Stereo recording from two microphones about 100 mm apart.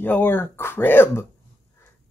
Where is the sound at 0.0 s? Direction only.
20° left (ahead or behind).